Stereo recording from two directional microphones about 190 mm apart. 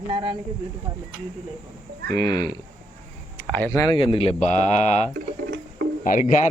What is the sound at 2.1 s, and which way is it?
Speech, 20° left (ahead or behind).